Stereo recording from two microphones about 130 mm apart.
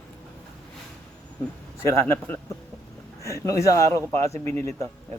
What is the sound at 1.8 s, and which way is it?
A man's voice, 20° left (ahead or behind).